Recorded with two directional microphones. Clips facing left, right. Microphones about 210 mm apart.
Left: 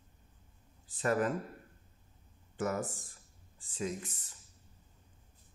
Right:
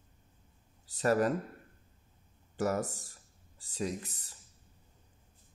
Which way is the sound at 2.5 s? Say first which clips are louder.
Right 3 dB; 40° right (ahead or behind).